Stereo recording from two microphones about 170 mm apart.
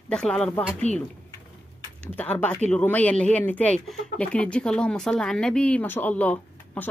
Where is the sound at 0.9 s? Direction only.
45° left (ahead or behind).